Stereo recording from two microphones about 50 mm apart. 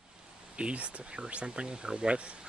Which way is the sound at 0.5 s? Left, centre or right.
Right.